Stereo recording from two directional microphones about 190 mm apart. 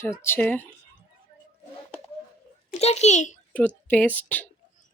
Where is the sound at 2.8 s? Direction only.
35° left (ahead or behind).